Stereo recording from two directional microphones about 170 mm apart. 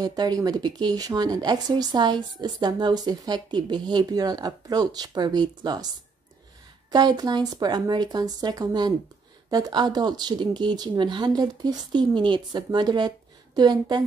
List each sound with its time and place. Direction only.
0.0 s speech: 25° right (ahead or behind)
6.9 s speech: 25° right (ahead or behind)